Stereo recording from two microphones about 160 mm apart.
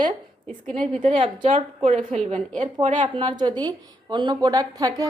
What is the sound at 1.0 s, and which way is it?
Speech, 35° right (ahead or behind).